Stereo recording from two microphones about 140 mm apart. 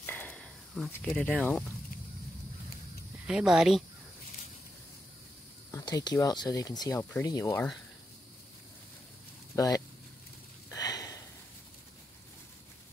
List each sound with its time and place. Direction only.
0.0 s a sound: 15° left (ahead or behind)
0.9 s speech: 10° left (ahead or behind)
3.3 s speech: 5° right (ahead or behind)
5.7 s speech: 25° left (ahead or behind)
10.7 s sniff: 25° left (ahead or behind)